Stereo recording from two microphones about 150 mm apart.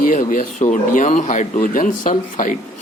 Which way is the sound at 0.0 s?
60° left (ahead or behind).